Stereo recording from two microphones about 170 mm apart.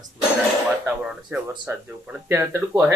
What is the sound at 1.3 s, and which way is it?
Speech, 15° right (ahead or behind).